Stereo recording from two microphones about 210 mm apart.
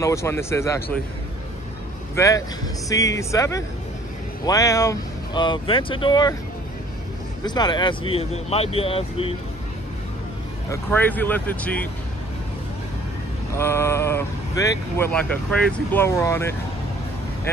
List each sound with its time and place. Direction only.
0.0 s speech: 15° left (ahead or behind)
2.1 s speech: 15° left (ahead or behind)
7.4 s speech: 20° left (ahead or behind)
10.7 s speech: 10° left (ahead or behind)
13.6 s speech: 10° left (ahead or behind)